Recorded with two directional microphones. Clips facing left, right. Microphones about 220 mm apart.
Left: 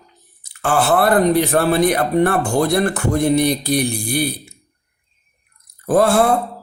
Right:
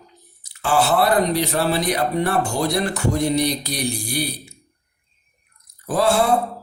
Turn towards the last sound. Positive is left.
turn(degrees=55)  # may be behind; listen again after turning